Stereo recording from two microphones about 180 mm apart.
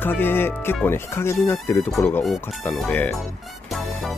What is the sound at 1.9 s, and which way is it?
Speech, centre (ahead or behind).